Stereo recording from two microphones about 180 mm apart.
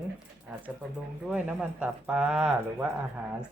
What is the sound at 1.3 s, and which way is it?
Speech, 5° right (ahead or behind).